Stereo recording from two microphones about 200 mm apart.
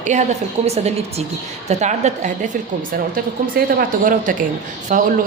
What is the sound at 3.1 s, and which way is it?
A woman's voice, 45° right (ahead or behind).